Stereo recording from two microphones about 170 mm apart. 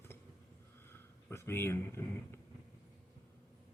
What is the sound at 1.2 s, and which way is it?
Speech, 15° left (ahead or behind).